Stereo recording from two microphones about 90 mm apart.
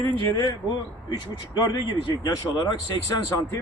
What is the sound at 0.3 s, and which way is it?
Speech, 55° left (ahead or behind).